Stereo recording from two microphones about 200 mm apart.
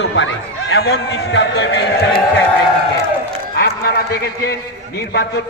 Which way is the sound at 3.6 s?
50° left (ahead or behind).